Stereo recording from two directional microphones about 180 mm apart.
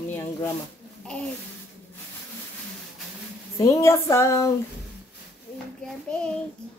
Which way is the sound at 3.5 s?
15° left (ahead or behind).